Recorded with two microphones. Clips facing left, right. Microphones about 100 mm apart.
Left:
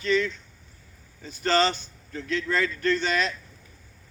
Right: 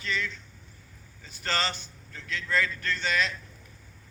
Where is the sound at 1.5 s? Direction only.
25° left (ahead or behind).